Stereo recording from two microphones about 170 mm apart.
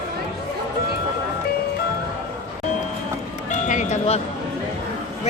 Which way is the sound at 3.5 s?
45° left (ahead or behind).